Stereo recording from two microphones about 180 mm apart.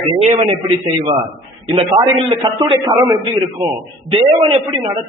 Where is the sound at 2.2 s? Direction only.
25° right (ahead or behind).